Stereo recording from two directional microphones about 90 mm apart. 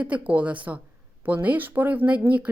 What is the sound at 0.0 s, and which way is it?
A woman's voice, 15° right (ahead or behind).